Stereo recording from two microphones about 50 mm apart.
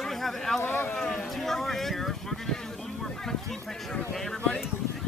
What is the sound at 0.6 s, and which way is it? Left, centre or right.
Speech, left.